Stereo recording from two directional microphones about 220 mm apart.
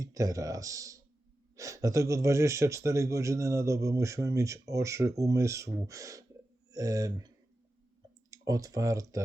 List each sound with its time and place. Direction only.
0.0 s speech: 15° right (ahead or behind)
8.3 s speech: 15° right (ahead or behind)